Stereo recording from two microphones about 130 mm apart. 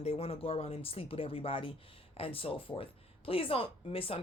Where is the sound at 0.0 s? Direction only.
50° left (ahead or behind).